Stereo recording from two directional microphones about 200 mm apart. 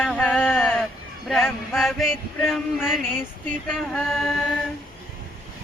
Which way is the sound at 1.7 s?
Centre (ahead or behind).